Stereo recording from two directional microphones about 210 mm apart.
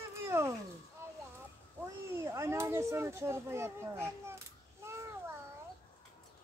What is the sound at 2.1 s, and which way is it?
Speech, 10° right (ahead or behind).